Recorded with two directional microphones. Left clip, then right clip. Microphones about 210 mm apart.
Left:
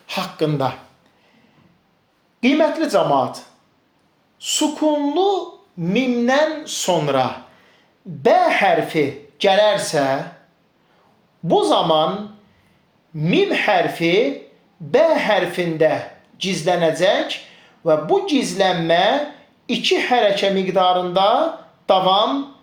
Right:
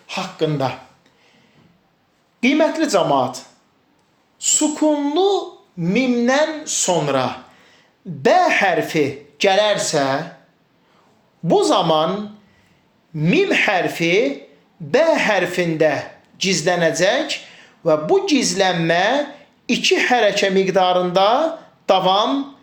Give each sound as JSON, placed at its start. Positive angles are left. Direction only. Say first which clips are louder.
{"t": 0.1, "sound": "a sound", "louder": "left 1 dB", "side_deg": 35}
{"t": 2.4, "sound": "a woman's voice", "louder": "even", "side_deg": -15}
{"t": 8.2, "sound": "speech", "louder": "even", "side_deg": -25}
{"t": 11.4, "sound": "speech", "louder": "even", "side_deg": -25}
{"t": 13.1, "sound": "speech", "louder": "right 2 dB", "side_deg": -25}